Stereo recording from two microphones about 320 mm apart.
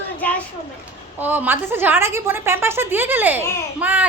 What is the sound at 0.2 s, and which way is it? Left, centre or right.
Children playing, centre.